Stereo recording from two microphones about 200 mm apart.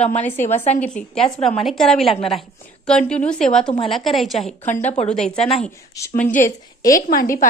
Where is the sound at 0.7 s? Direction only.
35° left (ahead or behind).